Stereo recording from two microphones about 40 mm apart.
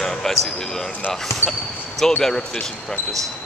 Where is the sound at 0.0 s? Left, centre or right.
Centre.